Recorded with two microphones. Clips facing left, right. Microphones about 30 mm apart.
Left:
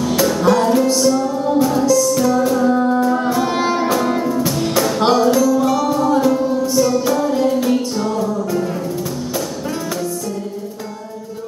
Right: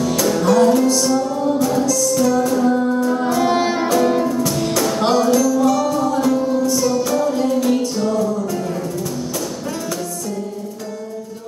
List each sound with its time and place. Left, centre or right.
0.0 s music: centre
0.9 s music: centre
3.3 s music: centre
4.4 s music: centre